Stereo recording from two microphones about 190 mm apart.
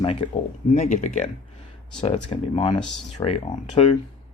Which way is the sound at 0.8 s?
40° left (ahead or behind).